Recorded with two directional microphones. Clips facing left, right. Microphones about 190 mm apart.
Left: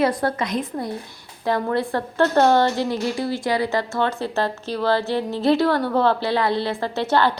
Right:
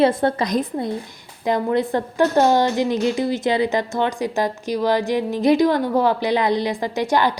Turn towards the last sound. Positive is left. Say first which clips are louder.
# right 1 dB
turn(degrees=-15)  # may be behind; listen again after turning